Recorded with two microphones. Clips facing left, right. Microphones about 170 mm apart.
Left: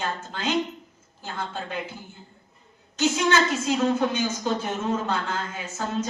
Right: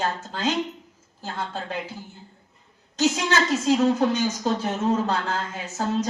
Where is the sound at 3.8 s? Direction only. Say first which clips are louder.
Right 2 dB; 35° right (ahead or behind).